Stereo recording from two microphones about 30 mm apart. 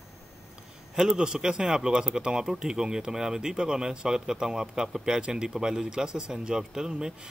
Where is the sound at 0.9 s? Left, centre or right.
Right.